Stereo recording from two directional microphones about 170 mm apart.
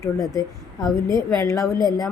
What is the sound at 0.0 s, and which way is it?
Speech, 20° left (ahead or behind).